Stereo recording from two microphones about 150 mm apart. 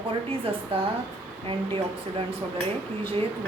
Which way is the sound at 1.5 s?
35° right (ahead or behind).